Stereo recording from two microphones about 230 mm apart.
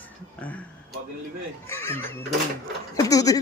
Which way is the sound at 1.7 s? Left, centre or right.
Centre.